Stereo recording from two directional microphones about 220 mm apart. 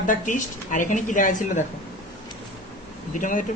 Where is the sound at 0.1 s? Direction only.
35° left (ahead or behind).